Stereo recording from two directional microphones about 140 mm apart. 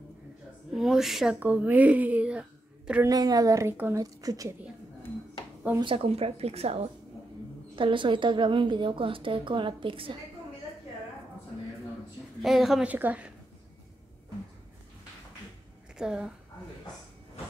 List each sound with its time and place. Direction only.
0.7 s a woman's voice: centre (ahead or behind)
3.1 s a woman's voice: 25° right (ahead or behind)
4.0 s a woman's voice: 25° right (ahead or behind)
5.8 s speech: 40° right (ahead or behind)
7.7 s a woman's voice: 35° right (ahead or behind)
12.4 s a woman's voice: centre (ahead or behind)
16.0 s a woman's voice: 5° right (ahead or behind)